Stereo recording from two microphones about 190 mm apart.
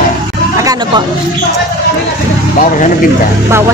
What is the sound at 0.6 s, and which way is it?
Speech, 20° right (ahead or behind).